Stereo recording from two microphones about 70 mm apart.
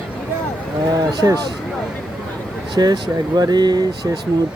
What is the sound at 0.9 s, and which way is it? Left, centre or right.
Speech, right.